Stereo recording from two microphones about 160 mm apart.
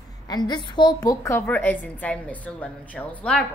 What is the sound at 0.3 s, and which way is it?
A woman's voice, 25° left (ahead or behind).